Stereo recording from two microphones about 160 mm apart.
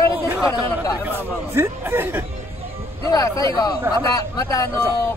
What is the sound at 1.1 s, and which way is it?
A man's voice, 15° right (ahead or behind).